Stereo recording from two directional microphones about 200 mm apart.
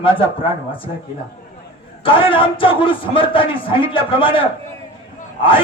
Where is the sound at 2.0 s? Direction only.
25° left (ahead or behind).